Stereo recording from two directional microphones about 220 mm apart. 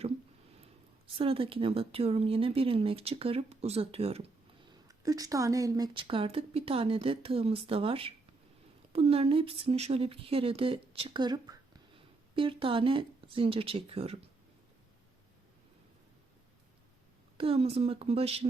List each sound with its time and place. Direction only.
1.0 s speech: 25° right (ahead or behind)
4.9 s speech: 15° right (ahead or behind)
17.3 s speech: 25° right (ahead or behind)